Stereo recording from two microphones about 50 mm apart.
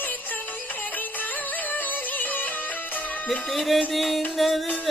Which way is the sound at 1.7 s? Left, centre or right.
Left.